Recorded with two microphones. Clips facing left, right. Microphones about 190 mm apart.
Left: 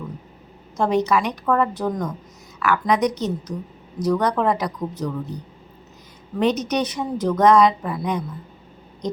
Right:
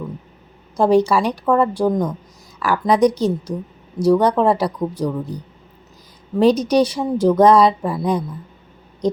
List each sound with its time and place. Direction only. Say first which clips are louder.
0.8 s speech: right 5 dB; 30° right (ahead or behind)
6.4 s speech: right 6 dB; 30° right (ahead or behind)